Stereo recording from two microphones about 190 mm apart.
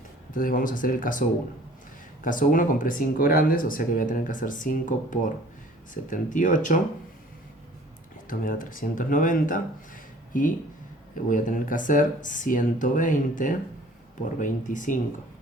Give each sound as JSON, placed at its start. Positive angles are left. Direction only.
{"t": 0.3, "sound": "speech", "side_deg": 45}
{"t": 2.2, "sound": "speech", "side_deg": 45}
{"t": 8.3, "sound": "speech", "side_deg": 45}